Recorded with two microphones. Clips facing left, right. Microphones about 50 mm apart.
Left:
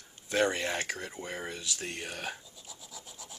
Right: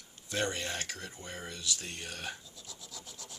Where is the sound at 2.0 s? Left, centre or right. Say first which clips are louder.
Left 3 dB; centre.